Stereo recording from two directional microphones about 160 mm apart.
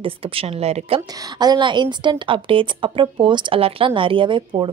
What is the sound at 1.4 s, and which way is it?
A woman's voice, 25° right (ahead or behind).